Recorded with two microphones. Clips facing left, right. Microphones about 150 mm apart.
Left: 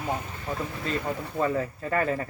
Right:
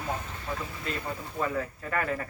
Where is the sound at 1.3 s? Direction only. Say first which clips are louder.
Left 4 dB; 30° left (ahead or behind).